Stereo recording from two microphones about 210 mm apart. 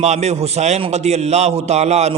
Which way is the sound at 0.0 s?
30° right (ahead or behind).